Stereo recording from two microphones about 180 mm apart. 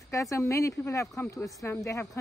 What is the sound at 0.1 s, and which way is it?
Speech, 15° left (ahead or behind).